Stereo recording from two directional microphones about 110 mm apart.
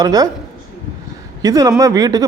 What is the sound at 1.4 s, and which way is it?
Speech, 30° right (ahead or behind).